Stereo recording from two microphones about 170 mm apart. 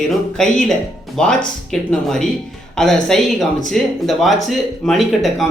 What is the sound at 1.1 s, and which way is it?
Speech, 5° left (ahead or behind).